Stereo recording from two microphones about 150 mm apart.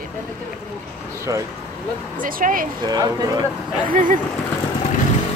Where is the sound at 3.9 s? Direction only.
65° right (ahead or behind).